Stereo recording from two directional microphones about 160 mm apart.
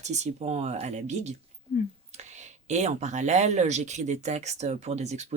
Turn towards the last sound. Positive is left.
turn(degrees=-45)  # may be behind; listen again after turning